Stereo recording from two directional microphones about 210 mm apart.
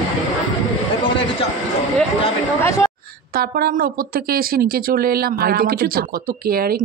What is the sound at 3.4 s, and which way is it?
Speech, 45° right (ahead or behind).